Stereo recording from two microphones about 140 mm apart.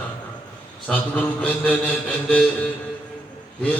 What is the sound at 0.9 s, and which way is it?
Mantra, 10° left (ahead or behind).